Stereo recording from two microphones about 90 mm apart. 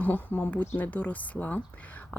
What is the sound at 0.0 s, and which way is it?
Speech, 20° left (ahead or behind).